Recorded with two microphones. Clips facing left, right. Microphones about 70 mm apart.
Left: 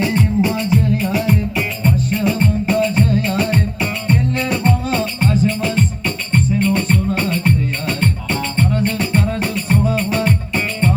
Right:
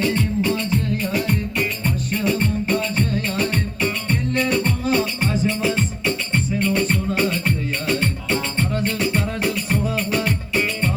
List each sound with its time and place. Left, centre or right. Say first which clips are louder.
0.0 s music: left 4 dB; centre
0.9 s music: left 4 dB; centre
5.6 s music: left 2 dB; centre
6.6 s music: left 3 dB; centre